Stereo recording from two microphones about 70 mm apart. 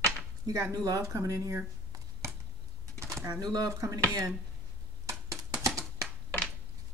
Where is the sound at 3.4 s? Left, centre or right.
Right.